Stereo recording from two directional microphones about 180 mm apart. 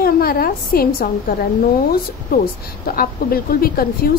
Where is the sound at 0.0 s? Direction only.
55° left (ahead or behind).